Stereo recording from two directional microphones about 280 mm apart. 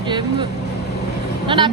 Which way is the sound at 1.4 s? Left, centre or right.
Centre.